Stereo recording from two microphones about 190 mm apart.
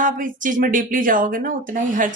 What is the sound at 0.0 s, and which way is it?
Speech, 45° right (ahead or behind).